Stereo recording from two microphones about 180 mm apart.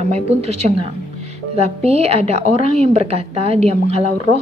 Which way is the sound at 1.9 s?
35° right (ahead or behind).